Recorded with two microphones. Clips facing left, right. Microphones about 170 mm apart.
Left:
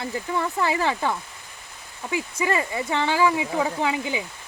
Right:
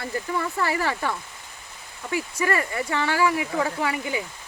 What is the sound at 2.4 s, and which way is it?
Speech, 20° left (ahead or behind).